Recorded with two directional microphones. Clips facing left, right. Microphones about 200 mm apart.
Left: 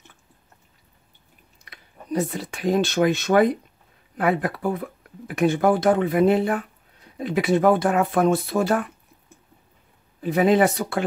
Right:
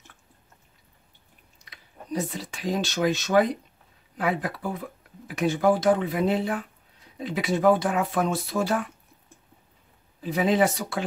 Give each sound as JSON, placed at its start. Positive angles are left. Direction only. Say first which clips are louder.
{"t": 1.6, "sound": "speech", "louder": "left 1 dB", "side_deg": 55}
{"t": 10.2, "sound": "speech", "louder": "left 4 dB", "side_deg": 55}